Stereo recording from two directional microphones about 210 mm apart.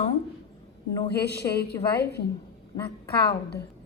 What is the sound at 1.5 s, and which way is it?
Speech, 50° left (ahead or behind).